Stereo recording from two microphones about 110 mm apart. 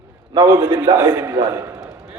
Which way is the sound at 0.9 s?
40° right (ahead or behind).